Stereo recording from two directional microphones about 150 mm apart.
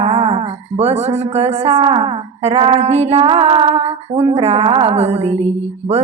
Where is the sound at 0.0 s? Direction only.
40° right (ahead or behind).